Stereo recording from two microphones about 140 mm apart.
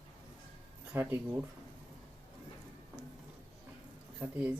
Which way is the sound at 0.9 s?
20° right (ahead or behind).